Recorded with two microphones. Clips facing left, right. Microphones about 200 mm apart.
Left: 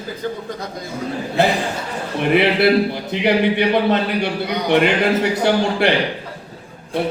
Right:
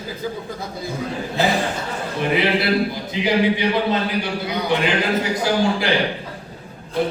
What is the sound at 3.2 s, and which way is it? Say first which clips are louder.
A man's voice: left 2 dB; 65° left (ahead or behind).